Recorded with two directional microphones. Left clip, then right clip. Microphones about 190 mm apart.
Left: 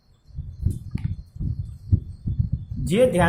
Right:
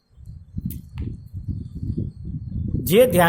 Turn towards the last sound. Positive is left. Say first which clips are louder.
# right 4 dB
turn(degrees=-50)  # may be behind; listen again after turning